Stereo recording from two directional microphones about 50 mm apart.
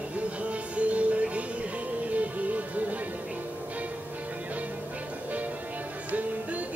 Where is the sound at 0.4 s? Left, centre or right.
Right.